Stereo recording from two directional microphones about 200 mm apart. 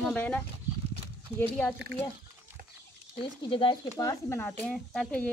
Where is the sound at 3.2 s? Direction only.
25° left (ahead or behind).